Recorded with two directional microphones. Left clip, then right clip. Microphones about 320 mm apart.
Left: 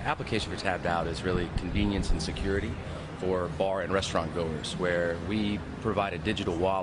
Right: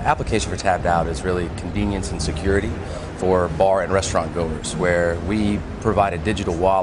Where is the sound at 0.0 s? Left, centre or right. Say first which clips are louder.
Right 10 dB; centre.